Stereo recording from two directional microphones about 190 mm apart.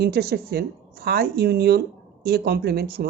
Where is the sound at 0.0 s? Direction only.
60° right (ahead or behind).